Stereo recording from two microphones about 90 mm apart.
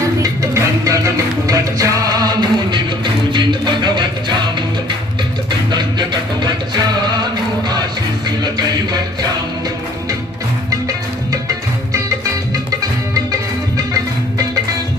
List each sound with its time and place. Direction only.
0.2 s music: 35° right (ahead or behind); by 4.4 s 55° right (ahead or behind)
5.5 s music: 55° right (ahead or behind)
10.7 s music: 40° right (ahead or behind)